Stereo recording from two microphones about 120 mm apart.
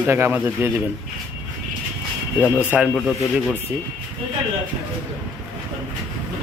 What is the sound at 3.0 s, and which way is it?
Speech, centre (ahead or behind).